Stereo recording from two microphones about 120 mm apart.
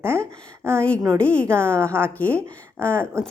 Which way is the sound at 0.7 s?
10° left (ahead or behind).